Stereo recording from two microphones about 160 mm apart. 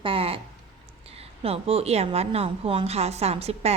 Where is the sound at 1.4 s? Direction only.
40° right (ahead or behind).